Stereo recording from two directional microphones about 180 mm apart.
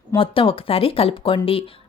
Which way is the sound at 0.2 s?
30° left (ahead or behind).